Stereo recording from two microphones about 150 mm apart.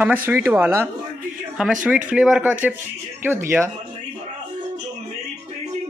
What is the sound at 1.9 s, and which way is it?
Speech, 10° right (ahead or behind).